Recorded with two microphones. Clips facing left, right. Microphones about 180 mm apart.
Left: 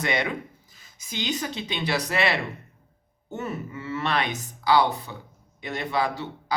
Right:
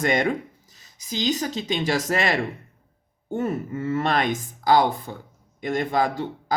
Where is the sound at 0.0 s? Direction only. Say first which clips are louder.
Right 5 dB; 45° right (ahead or behind).